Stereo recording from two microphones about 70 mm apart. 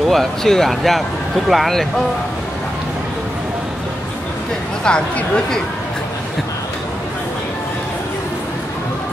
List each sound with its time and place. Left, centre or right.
0.1 s speech: centre
4.8 s speech: centre